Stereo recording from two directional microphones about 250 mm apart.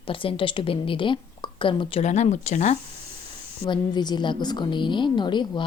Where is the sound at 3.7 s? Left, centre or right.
Centre.